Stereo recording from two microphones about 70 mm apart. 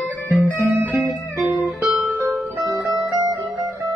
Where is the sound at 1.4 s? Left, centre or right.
Centre.